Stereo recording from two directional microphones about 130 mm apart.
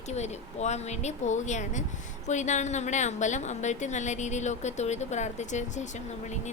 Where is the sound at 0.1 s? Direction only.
60° left (ahead or behind).